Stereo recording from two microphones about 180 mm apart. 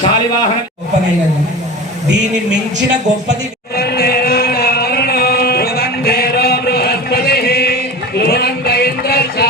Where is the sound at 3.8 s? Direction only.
60° left (ahead or behind).